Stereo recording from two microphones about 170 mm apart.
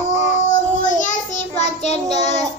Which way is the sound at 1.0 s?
45° left (ahead or behind).